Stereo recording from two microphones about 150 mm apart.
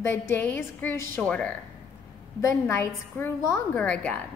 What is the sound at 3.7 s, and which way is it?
Speech, 10° left (ahead or behind).